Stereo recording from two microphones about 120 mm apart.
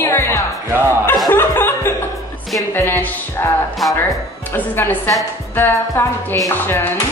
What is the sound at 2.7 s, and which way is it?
A woman's voice, 20° left (ahead or behind).